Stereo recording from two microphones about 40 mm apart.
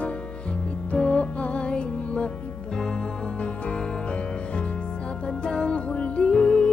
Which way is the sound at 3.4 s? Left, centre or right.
Left.